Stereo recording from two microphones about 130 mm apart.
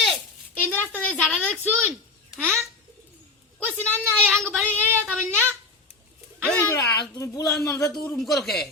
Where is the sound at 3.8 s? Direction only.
10° left (ahead or behind).